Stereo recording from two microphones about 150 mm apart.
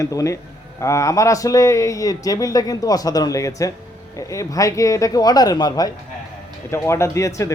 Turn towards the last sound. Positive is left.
turn(degrees=20)  # may be behind; listen again after turning